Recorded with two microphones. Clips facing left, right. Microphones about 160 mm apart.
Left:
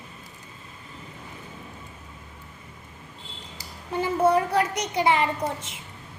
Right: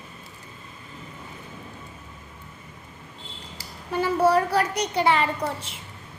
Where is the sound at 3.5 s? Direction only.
25° left (ahead or behind).